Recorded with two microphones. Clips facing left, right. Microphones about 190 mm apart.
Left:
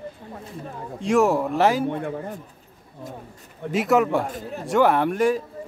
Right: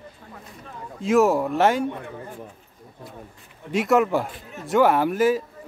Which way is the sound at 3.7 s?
Centre (ahead or behind).